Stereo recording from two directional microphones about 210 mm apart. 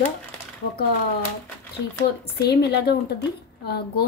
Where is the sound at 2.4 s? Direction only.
50° left (ahead or behind).